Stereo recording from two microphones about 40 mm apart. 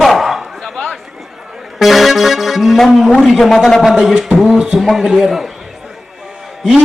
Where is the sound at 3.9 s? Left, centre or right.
Centre.